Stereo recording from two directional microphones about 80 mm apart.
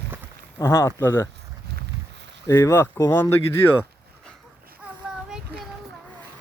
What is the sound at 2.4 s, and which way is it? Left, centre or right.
Speech, left.